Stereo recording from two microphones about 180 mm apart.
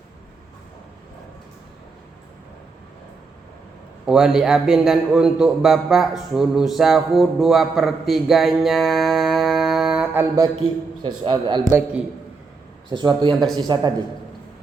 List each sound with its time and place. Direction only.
4.0 s a man's voice: 5° right (ahead or behind)
11.0 s a man's voice: 25° right (ahead or behind)
11.7 s a man's voice: 5° right (ahead or behind)
12.9 s a man's voice: 25° right (ahead or behind)